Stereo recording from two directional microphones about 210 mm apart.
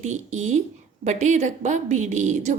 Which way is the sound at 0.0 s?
35° right (ahead or behind).